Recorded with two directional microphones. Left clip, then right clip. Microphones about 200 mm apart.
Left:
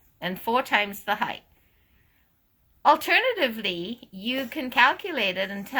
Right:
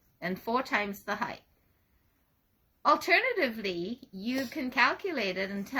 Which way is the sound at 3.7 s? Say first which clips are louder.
Left 3 dB; 80° left.